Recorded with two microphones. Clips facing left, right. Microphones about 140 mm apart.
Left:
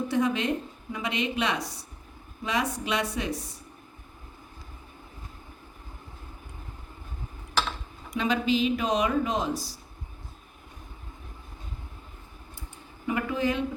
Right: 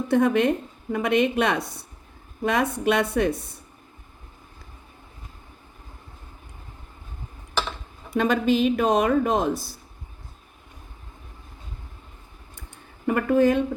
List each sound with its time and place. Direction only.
0.1 s a woman's voice: 55° right (ahead or behind)
8.1 s speech: 50° right (ahead or behind)
13.1 s speech: 50° right (ahead or behind)